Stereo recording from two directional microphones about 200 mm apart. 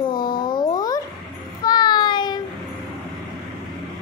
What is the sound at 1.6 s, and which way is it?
Child singing, 20° left (ahead or behind).